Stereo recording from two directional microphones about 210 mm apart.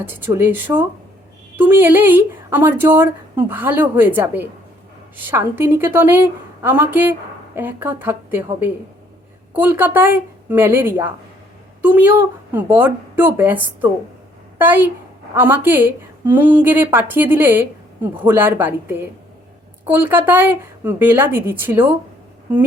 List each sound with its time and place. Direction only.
0.3 s a woman's voice: 10° right (ahead or behind)
14.6 s a woman's voice: 10° right (ahead or behind)